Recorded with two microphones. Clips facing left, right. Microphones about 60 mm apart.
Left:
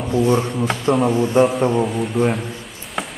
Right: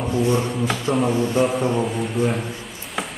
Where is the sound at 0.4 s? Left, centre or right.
Centre.